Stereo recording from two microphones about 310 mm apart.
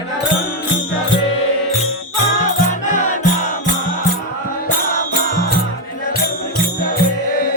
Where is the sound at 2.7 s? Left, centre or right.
Left.